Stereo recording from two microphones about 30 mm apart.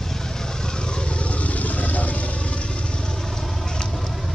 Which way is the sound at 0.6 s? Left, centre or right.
Left.